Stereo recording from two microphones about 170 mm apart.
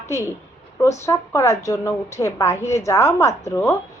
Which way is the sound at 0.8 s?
15° left (ahead or behind).